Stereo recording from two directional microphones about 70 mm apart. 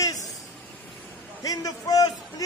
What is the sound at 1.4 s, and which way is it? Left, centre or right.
A man's voice, left.